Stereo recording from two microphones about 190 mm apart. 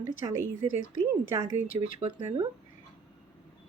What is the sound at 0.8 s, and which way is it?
Speech, 45° left (ahead or behind).